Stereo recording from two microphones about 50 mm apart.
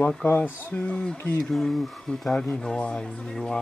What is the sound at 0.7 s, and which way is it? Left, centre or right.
Mantra, left.